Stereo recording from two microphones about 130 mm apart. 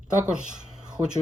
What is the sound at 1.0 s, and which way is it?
Speech, 25° right (ahead or behind).